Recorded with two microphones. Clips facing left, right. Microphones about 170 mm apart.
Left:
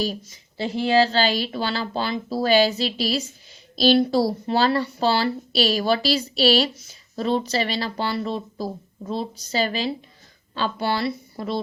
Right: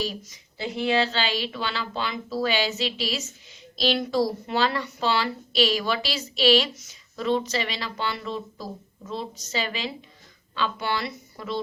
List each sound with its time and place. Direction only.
0.0 s speech: 35° left (ahead or behind)